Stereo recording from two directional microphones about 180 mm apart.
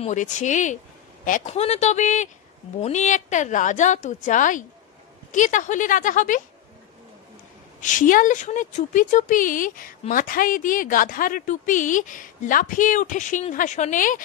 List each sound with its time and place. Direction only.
0.0 s speech: 40° left (ahead or behind)
7.8 s speech: 45° left (ahead or behind)